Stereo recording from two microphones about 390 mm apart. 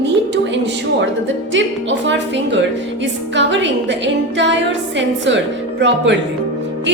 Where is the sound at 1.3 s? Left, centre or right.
Right.